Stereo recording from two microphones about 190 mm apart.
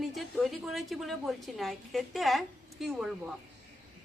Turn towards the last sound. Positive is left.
turn(degrees=-5)  # may be behind; listen again after turning